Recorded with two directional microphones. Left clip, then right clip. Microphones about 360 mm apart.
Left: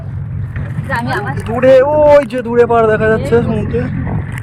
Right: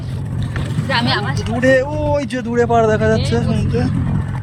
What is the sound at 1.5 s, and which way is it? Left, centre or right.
Speech, centre.